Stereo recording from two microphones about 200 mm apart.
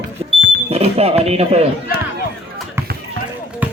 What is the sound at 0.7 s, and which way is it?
Speech, 30° right (ahead or behind).